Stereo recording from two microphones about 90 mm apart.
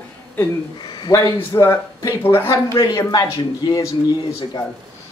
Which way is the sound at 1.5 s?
25° left (ahead or behind).